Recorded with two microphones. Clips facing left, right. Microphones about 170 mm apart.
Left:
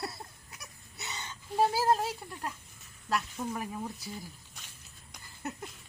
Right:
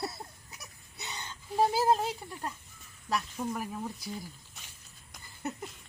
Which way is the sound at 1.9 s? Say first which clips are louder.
Right 1 dB; centre (ahead or behind).